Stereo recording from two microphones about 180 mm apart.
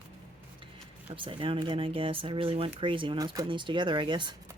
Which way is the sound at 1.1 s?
30° right (ahead or behind).